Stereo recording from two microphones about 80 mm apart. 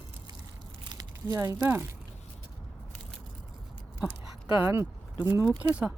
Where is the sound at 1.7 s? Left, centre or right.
Right.